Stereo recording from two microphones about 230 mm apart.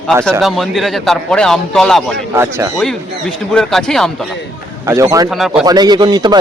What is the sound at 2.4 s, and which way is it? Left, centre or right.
Speech, centre.